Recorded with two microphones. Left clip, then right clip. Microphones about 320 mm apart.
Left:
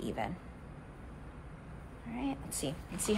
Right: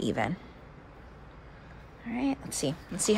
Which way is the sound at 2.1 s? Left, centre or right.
Right.